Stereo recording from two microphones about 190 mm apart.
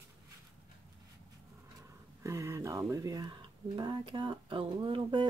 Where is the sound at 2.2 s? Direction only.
15° right (ahead or behind).